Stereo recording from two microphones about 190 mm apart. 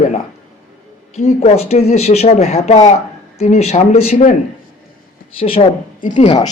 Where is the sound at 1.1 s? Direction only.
35° left (ahead or behind).